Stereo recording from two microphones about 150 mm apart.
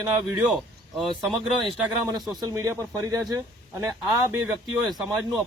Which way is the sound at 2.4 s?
25° right (ahead or behind).